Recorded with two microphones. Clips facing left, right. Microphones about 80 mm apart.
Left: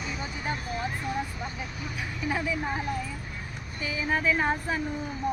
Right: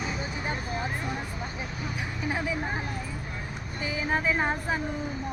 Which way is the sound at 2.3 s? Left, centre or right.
Right.